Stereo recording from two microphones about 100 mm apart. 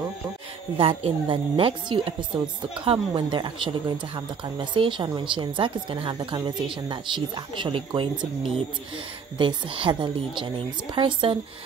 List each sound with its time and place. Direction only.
0.7 s speech: 65° right (ahead or behind)